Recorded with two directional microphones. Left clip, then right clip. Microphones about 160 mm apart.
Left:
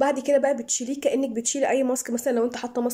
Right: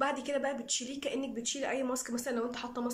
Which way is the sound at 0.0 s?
40° left (ahead or behind).